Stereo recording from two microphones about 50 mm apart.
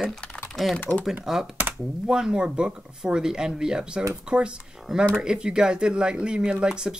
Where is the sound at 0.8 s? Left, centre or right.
Left.